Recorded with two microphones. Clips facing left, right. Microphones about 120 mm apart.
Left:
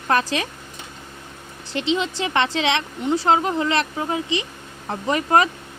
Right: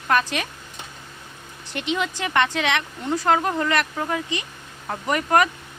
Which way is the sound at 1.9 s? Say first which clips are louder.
Left 2 dB; 25° left (ahead or behind).